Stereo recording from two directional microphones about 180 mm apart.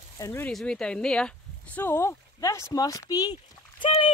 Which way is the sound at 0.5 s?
5° left (ahead or behind).